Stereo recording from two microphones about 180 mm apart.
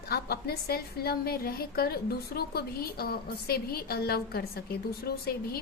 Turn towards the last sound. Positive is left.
turn(degrees=60)  # may be behind; listen again after turning